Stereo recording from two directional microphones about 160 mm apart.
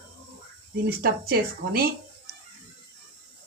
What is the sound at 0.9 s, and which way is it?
Speech, 75° right (ahead or behind).